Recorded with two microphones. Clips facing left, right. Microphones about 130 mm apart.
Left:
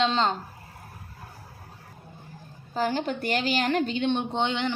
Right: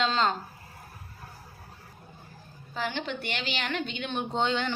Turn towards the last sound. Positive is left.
turn(degrees=20)  # may be behind; listen again after turning